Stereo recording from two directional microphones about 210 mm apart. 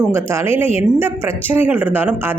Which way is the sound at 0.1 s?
10° right (ahead or behind).